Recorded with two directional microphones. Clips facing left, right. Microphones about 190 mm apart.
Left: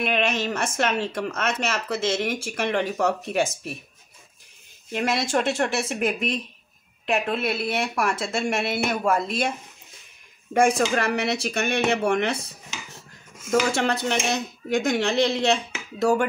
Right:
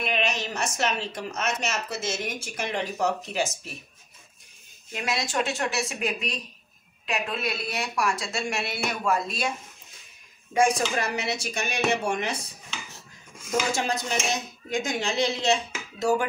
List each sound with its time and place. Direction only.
0.0 s speech: 60° left (ahead or behind)
4.9 s a woman's voice: 55° left (ahead or behind)
11.1 s speech: 60° left (ahead or behind)
13.5 s speech: 65° left (ahead or behind)